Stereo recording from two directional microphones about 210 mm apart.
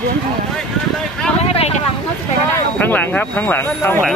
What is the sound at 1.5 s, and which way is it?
Speech, 30° left (ahead or behind).